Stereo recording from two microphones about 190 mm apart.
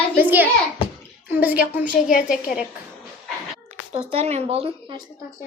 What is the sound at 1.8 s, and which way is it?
Speech, 50° left (ahead or behind).